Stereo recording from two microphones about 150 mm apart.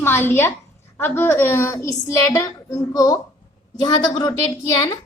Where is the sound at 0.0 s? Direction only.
15° left (ahead or behind).